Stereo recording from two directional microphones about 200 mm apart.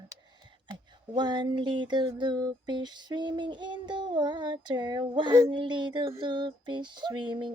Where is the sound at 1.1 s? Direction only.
20° right (ahead or behind).